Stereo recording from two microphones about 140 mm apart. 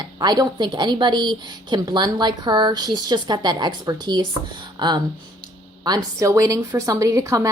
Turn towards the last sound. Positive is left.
turn(degrees=-20)  # may be behind; listen again after turning